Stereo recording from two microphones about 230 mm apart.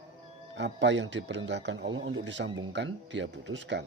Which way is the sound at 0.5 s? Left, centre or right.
Right.